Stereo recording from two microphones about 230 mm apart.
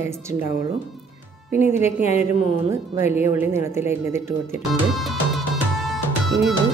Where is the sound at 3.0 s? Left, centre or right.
Centre.